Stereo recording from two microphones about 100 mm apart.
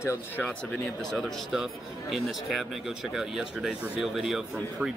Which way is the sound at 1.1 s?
Centre (ahead or behind).